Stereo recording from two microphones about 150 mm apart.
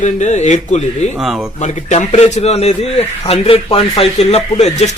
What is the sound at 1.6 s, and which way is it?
A man's voice, 50° left (ahead or behind).